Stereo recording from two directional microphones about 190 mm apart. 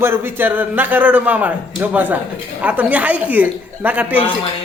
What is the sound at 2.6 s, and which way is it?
Speech, 10° right (ahead or behind).